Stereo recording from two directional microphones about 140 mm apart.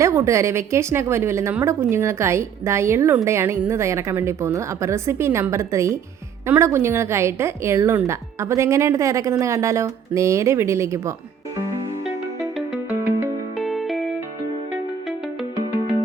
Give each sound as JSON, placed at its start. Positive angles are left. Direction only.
{"t": 0.0, "sound": "a woman's voice", "side_deg": -20}
{"t": 12.4, "sound": "music", "side_deg": 0}
{"t": 12.9, "sound": "music", "side_deg": -15}
{"t": 13.6, "sound": "music", "side_deg": 0}